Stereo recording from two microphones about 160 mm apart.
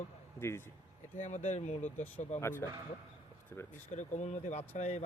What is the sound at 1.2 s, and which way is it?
Speech, 50° left (ahead or behind).